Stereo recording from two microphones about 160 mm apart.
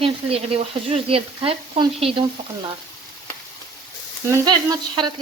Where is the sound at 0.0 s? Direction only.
40° right (ahead or behind).